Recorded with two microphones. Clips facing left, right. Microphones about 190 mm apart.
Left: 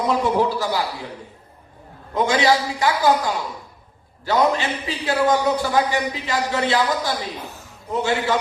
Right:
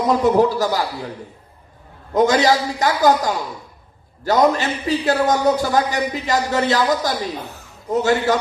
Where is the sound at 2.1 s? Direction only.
40° right (ahead or behind).